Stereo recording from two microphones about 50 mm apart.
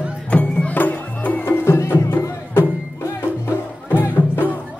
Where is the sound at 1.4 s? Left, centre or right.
Left.